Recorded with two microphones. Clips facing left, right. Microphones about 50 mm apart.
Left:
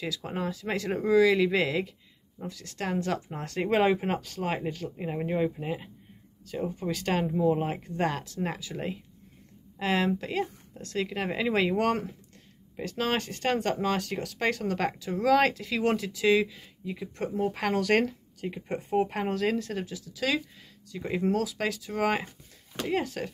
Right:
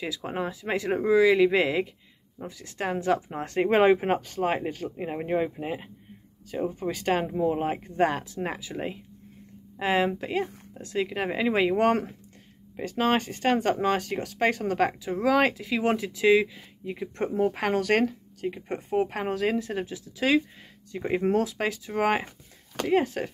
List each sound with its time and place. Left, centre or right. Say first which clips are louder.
0.0 s speech: right 2 dB; centre
17.4 s speech: right 2 dB; centre
17.9 s speech: right 1 dB; centre; by 21.6 s right
21.6 s speech: right 2 dB; right